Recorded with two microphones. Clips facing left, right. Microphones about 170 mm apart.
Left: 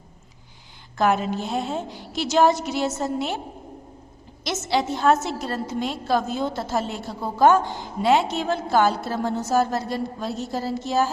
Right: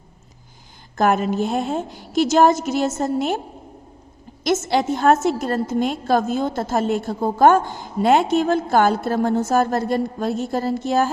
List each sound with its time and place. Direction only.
0.9 s a woman's voice: 50° right (ahead or behind)
4.4 s a woman's voice: 50° right (ahead or behind)